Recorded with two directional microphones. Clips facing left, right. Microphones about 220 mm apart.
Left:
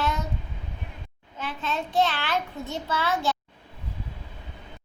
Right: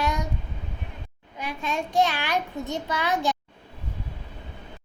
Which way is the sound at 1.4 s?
15° right (ahead or behind).